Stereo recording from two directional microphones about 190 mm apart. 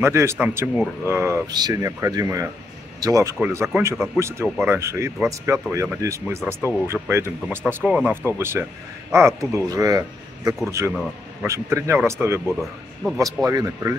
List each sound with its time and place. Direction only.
0.0 s speech: 15° right (ahead or behind)